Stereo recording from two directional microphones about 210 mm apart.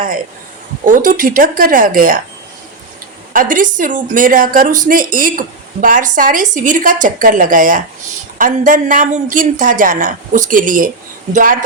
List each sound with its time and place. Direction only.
0.9 s a woman's voice: 40° right (ahead or behind)
3.3 s a woman's voice: 40° right (ahead or behind)